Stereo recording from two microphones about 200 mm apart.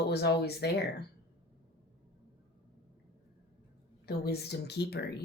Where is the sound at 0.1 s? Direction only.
55° left (ahead or behind).